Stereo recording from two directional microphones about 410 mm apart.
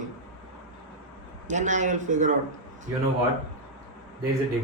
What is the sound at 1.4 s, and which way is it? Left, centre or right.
A man's voice, centre.